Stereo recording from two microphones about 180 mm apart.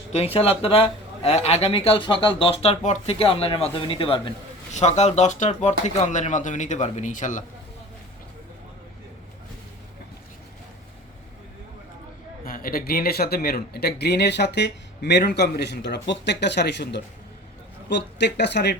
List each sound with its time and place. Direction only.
0.1 s speech: 35° left (ahead or behind)
12.5 s speech: 55° left (ahead or behind)